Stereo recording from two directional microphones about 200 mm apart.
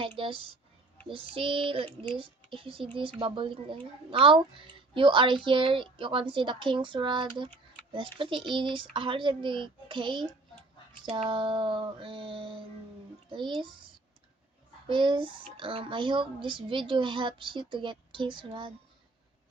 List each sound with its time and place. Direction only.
0.0 s a child's voice: 25° right (ahead or behind)
11.3 s a child's voice: 25° right (ahead or behind)
14.8 s a child's voice: 25° right (ahead or behind)